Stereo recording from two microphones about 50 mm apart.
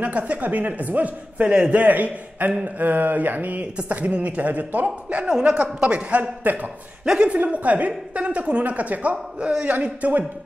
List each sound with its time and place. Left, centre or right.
0.0 s a man's voice: right
5.8 s a man's voice: right